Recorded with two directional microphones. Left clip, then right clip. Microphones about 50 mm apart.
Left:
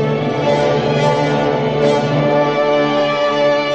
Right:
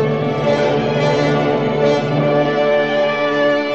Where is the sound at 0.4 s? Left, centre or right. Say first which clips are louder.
Left 1 dB; right.